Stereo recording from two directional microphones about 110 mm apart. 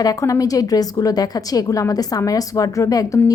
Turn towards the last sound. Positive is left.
turn(degrees=30)  # may be behind; listen again after turning